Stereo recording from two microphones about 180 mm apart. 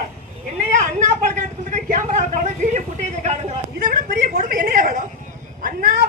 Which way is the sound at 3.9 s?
55° right (ahead or behind).